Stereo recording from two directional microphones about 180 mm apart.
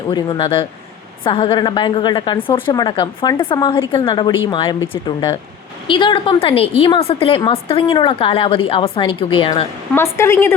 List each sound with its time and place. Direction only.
0.1 s a woman's voice: 25° left (ahead or behind)
9.9 s a woman's voice: 15° left (ahead or behind)